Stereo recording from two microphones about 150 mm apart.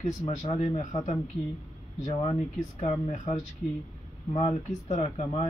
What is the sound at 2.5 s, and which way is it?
Speech, 55° left (ahead or behind).